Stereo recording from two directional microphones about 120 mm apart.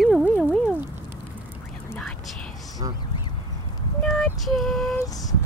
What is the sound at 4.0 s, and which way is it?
Female singing, centre (ahead or behind).